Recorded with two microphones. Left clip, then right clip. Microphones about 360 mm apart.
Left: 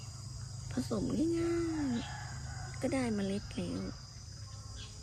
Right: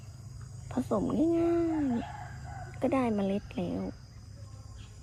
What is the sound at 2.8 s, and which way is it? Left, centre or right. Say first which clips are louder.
Speech: right 6 dB; centre.